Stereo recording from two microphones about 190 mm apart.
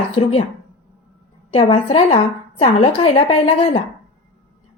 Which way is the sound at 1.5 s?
30° left (ahead or behind).